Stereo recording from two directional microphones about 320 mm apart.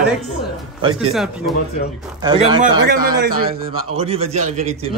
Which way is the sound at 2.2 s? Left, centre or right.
Centre.